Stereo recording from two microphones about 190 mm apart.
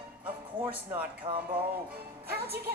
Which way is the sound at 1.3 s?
25° right (ahead or behind).